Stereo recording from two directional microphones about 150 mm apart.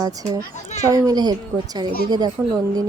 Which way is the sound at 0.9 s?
25° right (ahead or behind).